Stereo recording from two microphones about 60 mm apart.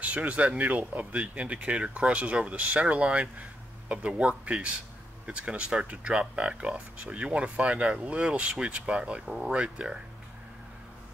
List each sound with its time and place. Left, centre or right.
0.0 s speech: right